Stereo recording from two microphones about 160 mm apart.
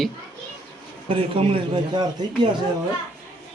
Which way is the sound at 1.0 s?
35° right (ahead or behind).